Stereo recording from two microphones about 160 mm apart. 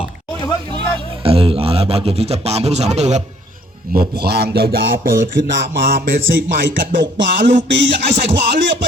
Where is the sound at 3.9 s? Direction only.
90° right.